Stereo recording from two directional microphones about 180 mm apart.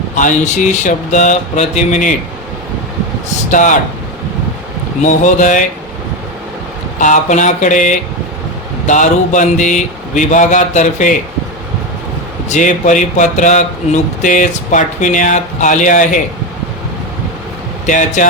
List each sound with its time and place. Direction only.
0.2 s speech: 45° left (ahead or behind)
3.5 s speech: 45° left (ahead or behind)
5.0 s speech: 45° left (ahead or behind)
7.0 s speech: 45° left (ahead or behind)
12.5 s speech: 45° left (ahead or behind)
17.8 s speech: 45° left (ahead or behind)